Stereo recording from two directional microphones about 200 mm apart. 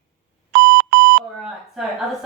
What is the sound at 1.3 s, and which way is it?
Speech, centre (ahead or behind).